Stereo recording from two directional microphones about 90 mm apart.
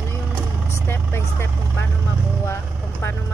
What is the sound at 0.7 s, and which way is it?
Speech, 30° left (ahead or behind).